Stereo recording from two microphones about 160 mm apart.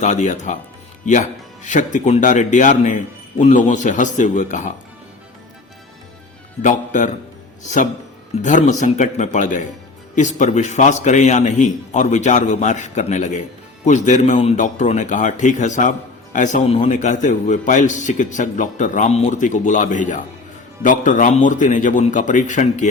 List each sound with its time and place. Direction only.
0.0 s a man's voice: 45° left (ahead or behind)
6.6 s a man's voice: 50° left (ahead or behind)